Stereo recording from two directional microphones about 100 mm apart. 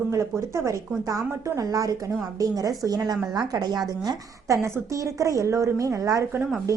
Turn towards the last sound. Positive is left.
turn(degrees=-35)  # may be behind; listen again after turning